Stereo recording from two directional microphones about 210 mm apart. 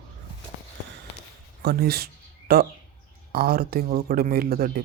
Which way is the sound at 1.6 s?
50° right (ahead or behind).